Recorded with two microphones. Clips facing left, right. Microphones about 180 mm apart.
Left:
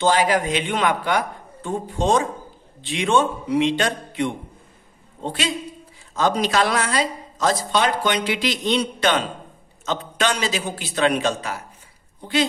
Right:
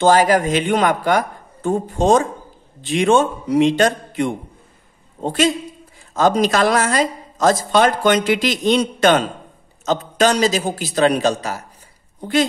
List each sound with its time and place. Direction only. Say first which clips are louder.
0.0 s a woman's voice: right 5 dB; 45° right (ahead or behind)